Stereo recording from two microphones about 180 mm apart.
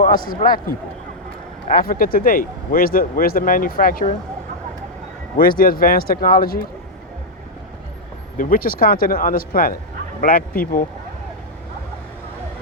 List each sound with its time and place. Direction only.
0.0 s speech: 50° left (ahead or behind)
1.7 s speech: 55° left (ahead or behind)
5.4 s speech: 50° left (ahead or behind)
8.4 s speech: 50° left (ahead or behind)